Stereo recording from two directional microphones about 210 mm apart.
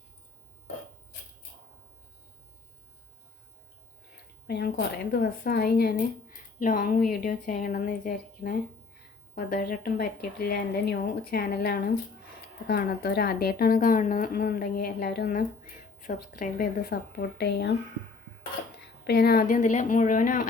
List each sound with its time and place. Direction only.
4.4 s speech: 50° left (ahead or behind)
19.0 s speech: 50° left (ahead or behind)